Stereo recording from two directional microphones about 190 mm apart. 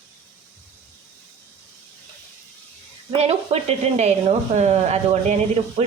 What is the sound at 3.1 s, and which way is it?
Speech, 35° right (ahead or behind).